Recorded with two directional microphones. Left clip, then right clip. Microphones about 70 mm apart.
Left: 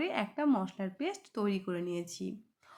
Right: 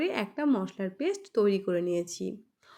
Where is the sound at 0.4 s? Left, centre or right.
Right.